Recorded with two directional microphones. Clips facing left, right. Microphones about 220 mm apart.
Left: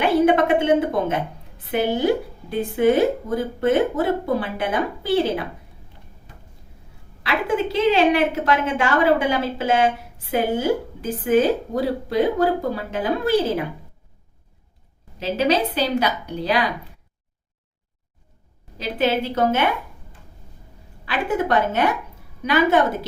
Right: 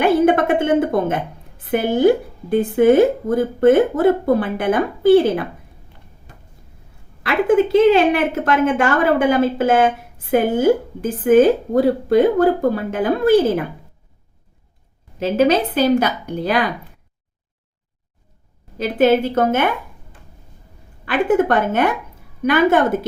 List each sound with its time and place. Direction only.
0.0 s a sound: 50° right (ahead or behind)
1.7 s a woman's voice: 50° right (ahead or behind)
7.2 s a woman's voice: 50° right (ahead or behind)
15.2 s a woman's voice: 50° right (ahead or behind)
18.8 s a woman's voice: 50° right (ahead or behind)
21.0 s a woman's voice: 50° right (ahead or behind)